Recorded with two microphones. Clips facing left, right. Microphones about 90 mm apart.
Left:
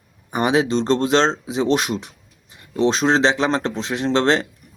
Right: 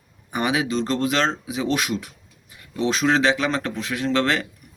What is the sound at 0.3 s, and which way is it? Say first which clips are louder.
Speech: left 4 dB; 25° left (ahead or behind).